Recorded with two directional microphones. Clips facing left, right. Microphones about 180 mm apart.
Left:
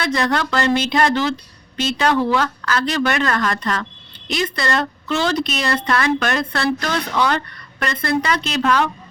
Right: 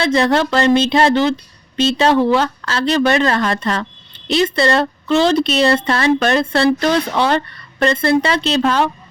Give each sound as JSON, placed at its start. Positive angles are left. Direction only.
{"t": 0.0, "sound": "speech", "side_deg": -25}